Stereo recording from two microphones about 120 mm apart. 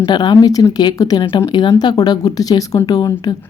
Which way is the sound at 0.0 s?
35° left (ahead or behind).